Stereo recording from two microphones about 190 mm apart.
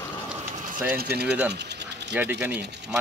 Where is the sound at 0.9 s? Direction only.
55° right (ahead or behind).